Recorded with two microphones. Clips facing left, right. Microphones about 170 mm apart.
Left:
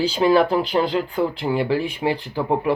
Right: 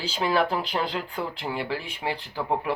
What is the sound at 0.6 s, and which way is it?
Speech, 30° left (ahead or behind).